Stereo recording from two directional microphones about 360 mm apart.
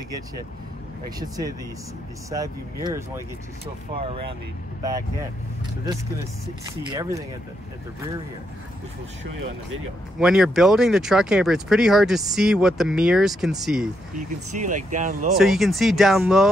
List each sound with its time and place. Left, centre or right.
1.2 s speech: centre
6.9 s speech: centre
10.1 s speech: centre
14.1 s speech: right
15.3 s speech: centre